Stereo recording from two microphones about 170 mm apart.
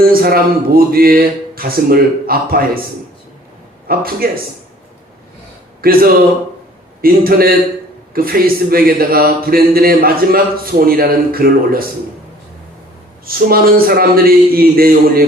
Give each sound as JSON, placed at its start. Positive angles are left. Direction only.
{"t": 0.1, "sound": "speech", "side_deg": -60}
{"t": 3.8, "sound": "speech", "side_deg": -60}
{"t": 5.8, "sound": "speech", "side_deg": -60}
{"t": 13.2, "sound": "speech", "side_deg": -60}